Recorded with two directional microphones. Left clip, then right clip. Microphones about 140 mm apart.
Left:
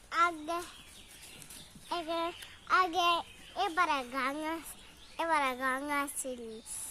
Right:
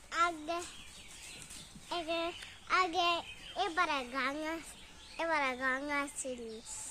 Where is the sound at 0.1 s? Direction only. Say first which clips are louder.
Left 3 dB; 55° left (ahead or behind).